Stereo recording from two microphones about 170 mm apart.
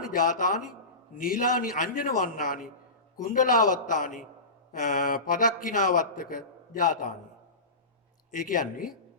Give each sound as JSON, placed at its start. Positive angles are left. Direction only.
{"t": 0.0, "sound": "speech", "side_deg": 50}
{"t": 8.3, "sound": "speech", "side_deg": 50}